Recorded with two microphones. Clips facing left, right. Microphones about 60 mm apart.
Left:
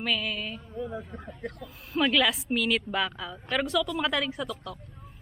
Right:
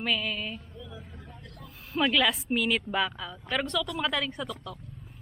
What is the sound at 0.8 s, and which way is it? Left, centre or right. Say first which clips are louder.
Speech: left 10 dB; left.